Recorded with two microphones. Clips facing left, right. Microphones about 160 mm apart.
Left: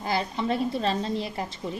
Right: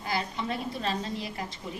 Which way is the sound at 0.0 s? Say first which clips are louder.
Left 4 dB; 30° left (ahead or behind).